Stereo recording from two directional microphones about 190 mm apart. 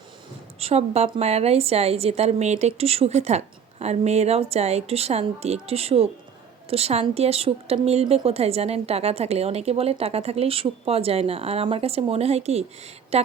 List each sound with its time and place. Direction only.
0.6 s a woman's voice: 35° right (ahead or behind)